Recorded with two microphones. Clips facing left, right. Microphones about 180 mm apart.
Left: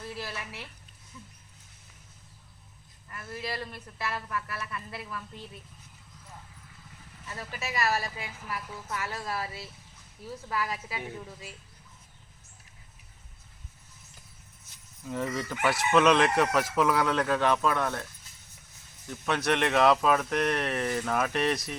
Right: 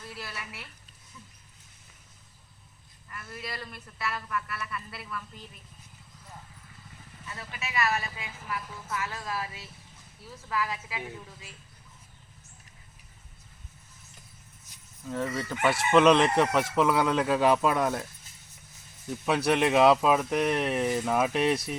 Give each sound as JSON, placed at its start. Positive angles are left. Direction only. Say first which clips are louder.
{"t": 0.1, "sound": "speech", "louder": "left 1 dB", "side_deg": 25}
{"t": 3.1, "sound": "speech", "louder": "left 3 dB", "side_deg": 30}
{"t": 7.3, "sound": "speech", "louder": "left 3 dB", "side_deg": 40}
{"t": 15.0, "sound": "speech", "louder": "right 1 dB", "side_deg": 0}
{"t": 19.1, "sound": "speech", "louder": "right 2 dB", "side_deg": -10}